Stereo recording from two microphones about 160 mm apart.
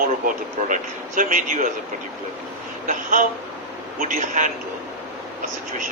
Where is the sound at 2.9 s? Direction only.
55° right (ahead or behind).